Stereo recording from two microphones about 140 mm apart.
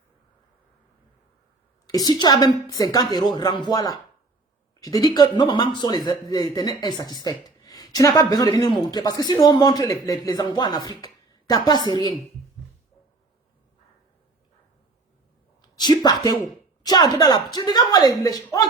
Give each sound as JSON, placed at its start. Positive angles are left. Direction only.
{"t": 1.9, "sound": "a woman's voice", "side_deg": 30}
{"t": 15.8, "sound": "a woman's voice", "side_deg": 30}